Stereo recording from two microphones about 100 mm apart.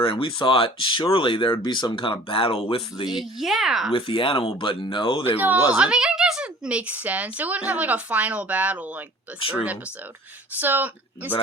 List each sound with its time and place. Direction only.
0.0 s speech: 60° left (ahead or behind)
3.1 s speech: 5° right (ahead or behind)
3.9 s speech: 60° left (ahead or behind)
5.4 s a woman's voice: 20° right (ahead or behind)
9.4 s speech: 65° left (ahead or behind)
10.6 s speech: 20° right (ahead or behind)